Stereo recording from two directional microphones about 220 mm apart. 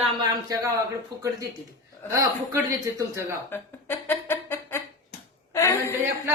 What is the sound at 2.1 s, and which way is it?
A man's voice, 15° right (ahead or behind).